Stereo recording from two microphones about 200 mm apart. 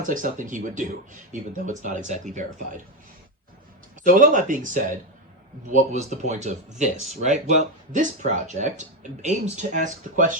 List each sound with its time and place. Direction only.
0.0 s speech: 40° right (ahead or behind)
4.1 s speech: 40° right (ahead or behind)